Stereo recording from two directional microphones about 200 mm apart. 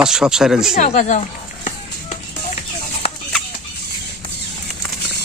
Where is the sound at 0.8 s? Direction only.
35° left (ahead or behind).